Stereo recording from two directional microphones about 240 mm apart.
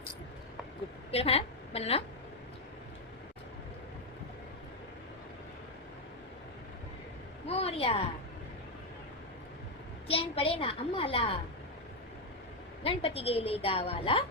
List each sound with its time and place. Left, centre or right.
1.1 s a woman's voice: left
7.4 s a sound: left
10.1 s a woman's voice: left
12.8 s a woman's voice: left